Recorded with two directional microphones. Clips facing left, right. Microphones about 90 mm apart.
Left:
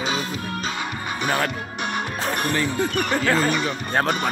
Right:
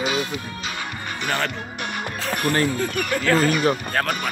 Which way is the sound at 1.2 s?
15° left (ahead or behind).